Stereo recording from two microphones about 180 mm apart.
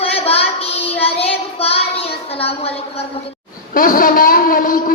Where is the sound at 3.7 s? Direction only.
50° left (ahead or behind).